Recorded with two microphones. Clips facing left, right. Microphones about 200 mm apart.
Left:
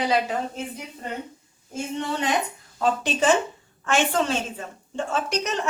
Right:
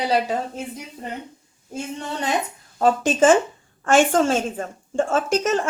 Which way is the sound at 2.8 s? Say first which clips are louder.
Right 6 dB; 45° right (ahead or behind).